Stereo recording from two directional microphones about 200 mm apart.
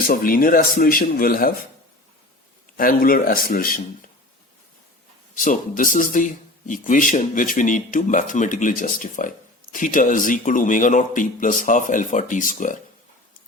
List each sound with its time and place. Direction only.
0.1 s speech: 45° left (ahead or behind)
2.7 s speech: 45° left (ahead or behind)
5.3 s speech: 40° left (ahead or behind)